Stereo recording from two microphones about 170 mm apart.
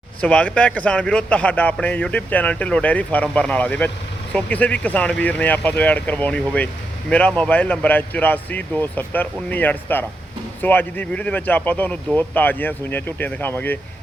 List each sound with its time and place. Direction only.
0.2 s speech: 5° left (ahead or behind)